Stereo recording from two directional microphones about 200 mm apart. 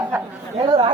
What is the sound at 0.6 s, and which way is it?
Speech, 25° right (ahead or behind).